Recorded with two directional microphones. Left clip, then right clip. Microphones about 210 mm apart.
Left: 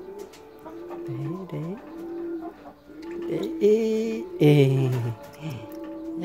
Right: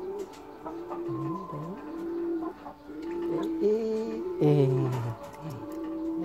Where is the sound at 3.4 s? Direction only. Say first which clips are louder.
Left 7 dB; 50° left (ahead or behind).